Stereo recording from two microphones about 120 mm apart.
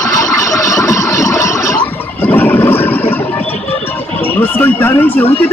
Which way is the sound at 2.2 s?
15° left (ahead or behind).